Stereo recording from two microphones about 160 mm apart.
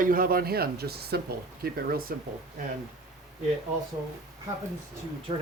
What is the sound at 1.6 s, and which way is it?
Speech, 65° right (ahead or behind).